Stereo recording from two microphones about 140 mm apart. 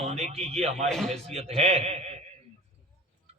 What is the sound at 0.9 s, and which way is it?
Speech, 5° left (ahead or behind).